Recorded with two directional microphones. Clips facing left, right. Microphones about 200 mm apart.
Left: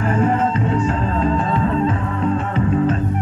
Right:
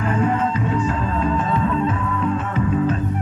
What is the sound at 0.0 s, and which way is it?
Music, 40° left (ahead or behind).